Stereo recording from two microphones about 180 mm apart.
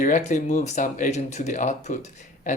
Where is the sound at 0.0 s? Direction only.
45° left (ahead or behind).